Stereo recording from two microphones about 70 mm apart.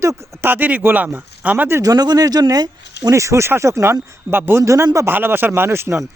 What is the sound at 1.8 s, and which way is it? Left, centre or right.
Speech, right.